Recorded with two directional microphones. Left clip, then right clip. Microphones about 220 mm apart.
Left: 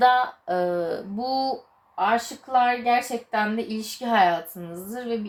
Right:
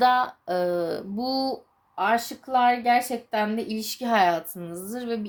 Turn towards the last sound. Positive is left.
turn(degrees=-30)  # may be behind; listen again after turning